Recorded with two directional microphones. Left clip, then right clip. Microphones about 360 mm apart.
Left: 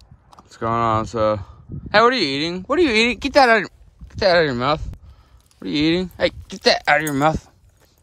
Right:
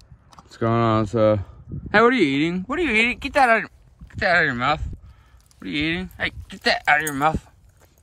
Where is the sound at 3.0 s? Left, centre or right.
Centre.